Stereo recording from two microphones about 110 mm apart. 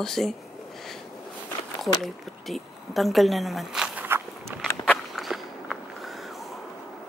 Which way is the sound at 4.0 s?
20° right (ahead or behind).